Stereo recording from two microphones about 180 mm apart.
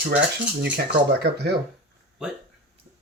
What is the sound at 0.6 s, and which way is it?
Speech, 65° right (ahead or behind).